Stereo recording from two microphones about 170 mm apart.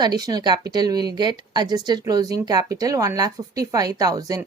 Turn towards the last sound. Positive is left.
turn(degrees=-20)  # may be behind; listen again after turning